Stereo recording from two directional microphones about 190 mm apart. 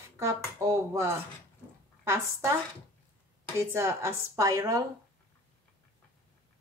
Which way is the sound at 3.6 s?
15° right (ahead or behind).